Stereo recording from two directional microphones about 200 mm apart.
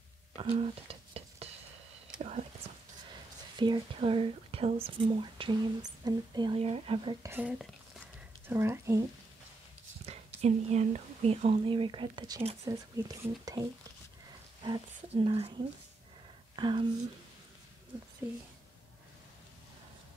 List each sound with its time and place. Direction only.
0.4 s a sound: 30° right (ahead or behind)
2.1 s whispering: 35° right (ahead or behind)
3.5 s speech: 25° right (ahead or behind)
7.2 s speech: 10° right (ahead or behind)
10.0 s speech: 35° right (ahead or behind)